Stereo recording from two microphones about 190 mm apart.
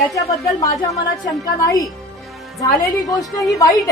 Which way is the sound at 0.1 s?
15° left (ahead or behind).